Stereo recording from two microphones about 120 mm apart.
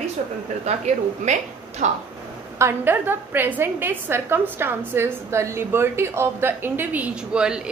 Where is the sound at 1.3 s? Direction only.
75° right (ahead or behind).